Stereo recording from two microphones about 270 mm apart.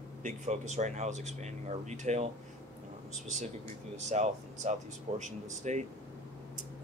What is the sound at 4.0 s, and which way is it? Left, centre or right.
Speech, right.